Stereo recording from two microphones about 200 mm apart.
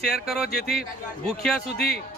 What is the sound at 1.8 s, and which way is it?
Speech, 55° left (ahead or behind).